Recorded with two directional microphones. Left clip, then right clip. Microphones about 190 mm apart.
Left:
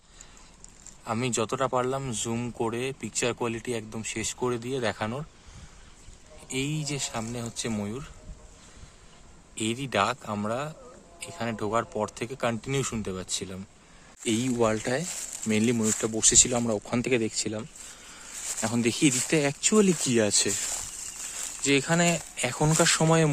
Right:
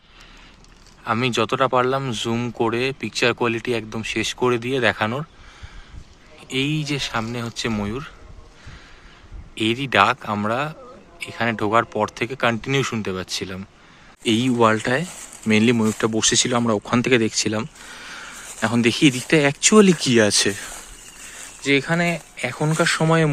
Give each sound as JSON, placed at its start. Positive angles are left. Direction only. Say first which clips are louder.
{"t": 1.0, "sound": "speech", "louder": "right 8 dB", "side_deg": 0}
{"t": 6.5, "sound": "speech", "louder": "right 8 dB", "side_deg": 0}
{"t": 9.6, "sound": "speech", "louder": "right 9 dB", "side_deg": 0}
{"t": 21.6, "sound": "speech", "louder": "right 5 dB", "side_deg": 15}